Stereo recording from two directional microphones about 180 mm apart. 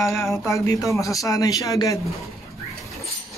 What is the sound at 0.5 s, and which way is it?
Speech, 20° left (ahead or behind).